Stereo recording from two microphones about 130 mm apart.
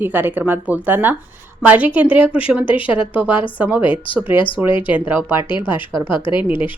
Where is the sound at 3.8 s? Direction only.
40° left (ahead or behind).